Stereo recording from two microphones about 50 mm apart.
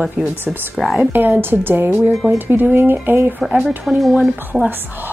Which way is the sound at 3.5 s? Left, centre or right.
Centre.